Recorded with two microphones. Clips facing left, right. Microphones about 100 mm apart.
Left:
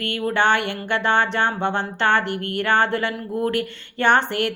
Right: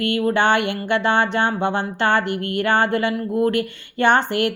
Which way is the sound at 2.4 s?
50° left (ahead or behind).